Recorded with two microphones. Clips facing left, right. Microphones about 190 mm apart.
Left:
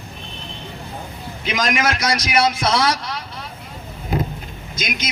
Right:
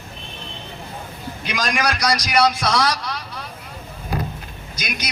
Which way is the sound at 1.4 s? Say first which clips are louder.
Left 2 dB; 25° left (ahead or behind).